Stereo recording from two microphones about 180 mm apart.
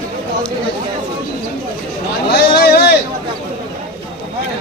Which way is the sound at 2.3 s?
60° left (ahead or behind).